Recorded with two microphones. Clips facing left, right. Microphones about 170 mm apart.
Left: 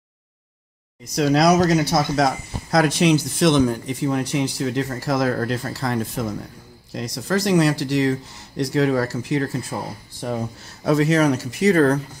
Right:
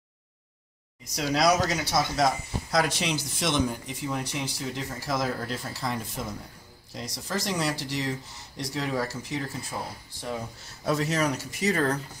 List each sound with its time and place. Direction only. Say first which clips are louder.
1.1 s speech: left 7 dB; 65° left (ahead or behind)
10.8 s speech: left 9 dB; 75° left (ahead or behind)